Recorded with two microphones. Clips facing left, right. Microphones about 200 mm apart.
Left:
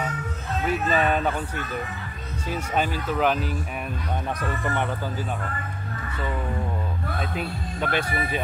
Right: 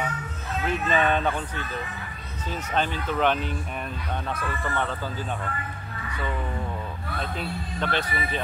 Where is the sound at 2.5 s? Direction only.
10° left (ahead or behind).